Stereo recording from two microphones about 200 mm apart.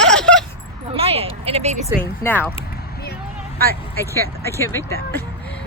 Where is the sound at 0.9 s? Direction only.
30° right (ahead or behind).